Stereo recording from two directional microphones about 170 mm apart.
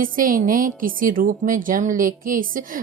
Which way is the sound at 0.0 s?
55° right (ahead or behind).